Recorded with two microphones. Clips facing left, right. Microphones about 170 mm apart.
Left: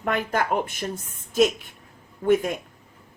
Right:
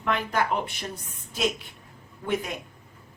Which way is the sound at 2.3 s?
50° left (ahead or behind).